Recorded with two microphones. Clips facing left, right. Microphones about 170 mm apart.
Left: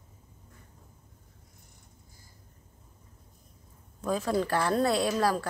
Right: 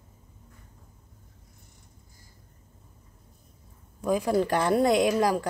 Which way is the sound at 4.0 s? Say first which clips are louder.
Right 4 dB; 15° right (ahead or behind).